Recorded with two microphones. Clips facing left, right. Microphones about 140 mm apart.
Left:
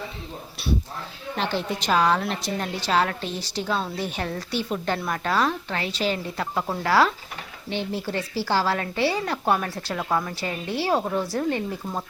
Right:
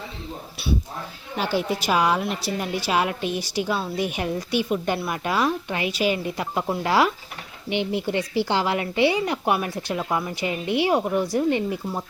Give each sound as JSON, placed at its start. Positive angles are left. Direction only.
{"t": 1.4, "sound": "a woman's voice", "side_deg": -10}